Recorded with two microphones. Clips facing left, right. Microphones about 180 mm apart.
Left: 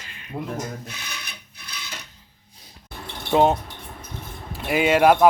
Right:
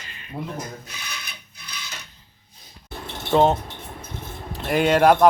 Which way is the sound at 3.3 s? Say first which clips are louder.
Even; 5° left (ahead or behind).